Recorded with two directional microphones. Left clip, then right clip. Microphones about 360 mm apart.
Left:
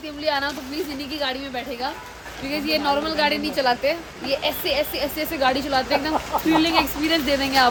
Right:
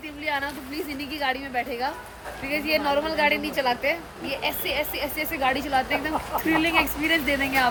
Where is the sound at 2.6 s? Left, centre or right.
Centre.